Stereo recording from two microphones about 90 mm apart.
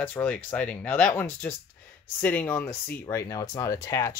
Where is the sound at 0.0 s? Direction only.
15° left (ahead or behind).